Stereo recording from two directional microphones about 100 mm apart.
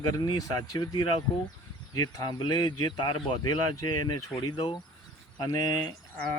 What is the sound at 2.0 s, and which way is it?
Speech, 35° left (ahead or behind).